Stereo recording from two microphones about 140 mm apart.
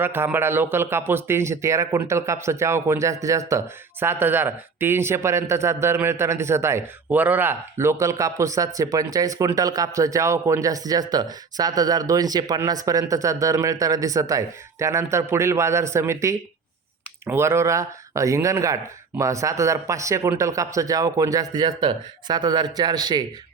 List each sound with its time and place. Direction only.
0.0 s speech: 15° right (ahead or behind)